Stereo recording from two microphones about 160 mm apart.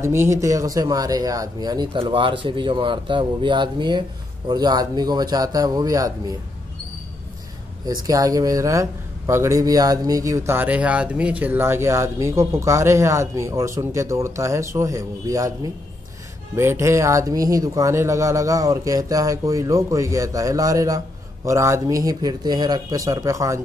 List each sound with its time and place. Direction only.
0.0 s a man's voice: 15° right (ahead or behind)
7.8 s a man's voice: 20° right (ahead or behind)